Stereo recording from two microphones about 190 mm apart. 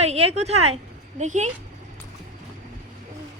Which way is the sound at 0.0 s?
35° right (ahead or behind).